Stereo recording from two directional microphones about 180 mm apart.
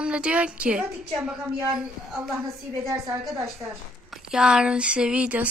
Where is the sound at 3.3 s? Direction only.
Centre (ahead or behind).